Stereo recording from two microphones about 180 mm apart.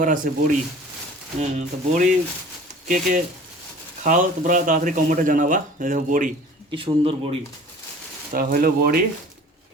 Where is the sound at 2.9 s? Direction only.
50° right (ahead or behind).